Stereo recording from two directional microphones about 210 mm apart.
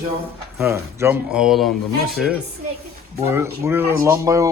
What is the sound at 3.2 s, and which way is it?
Speech, 10° right (ahead or behind).